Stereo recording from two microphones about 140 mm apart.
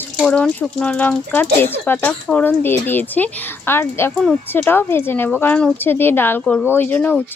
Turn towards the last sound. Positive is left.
turn(degrees=10)  # may be behind; listen again after turning